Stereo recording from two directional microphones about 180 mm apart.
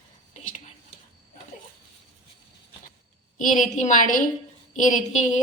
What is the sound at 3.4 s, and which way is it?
A woman's voice, 45° left (ahead or behind).